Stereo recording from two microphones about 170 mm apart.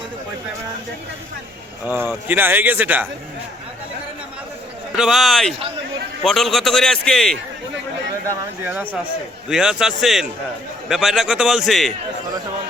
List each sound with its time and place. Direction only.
1.9 s speech: 10° right (ahead or behind)
4.9 s a man's voice: centre (ahead or behind)
8.3 s a man's voice: 10° right (ahead or behind)